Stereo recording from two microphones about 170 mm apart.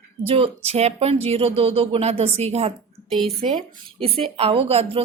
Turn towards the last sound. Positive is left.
turn(degrees=-35)  # may be behind; listen again after turning